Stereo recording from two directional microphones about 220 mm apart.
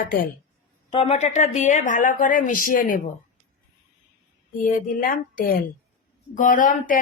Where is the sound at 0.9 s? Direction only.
25° left (ahead or behind).